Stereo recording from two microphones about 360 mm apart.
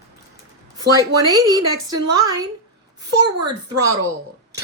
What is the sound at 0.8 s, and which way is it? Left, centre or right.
A woman's voice, centre.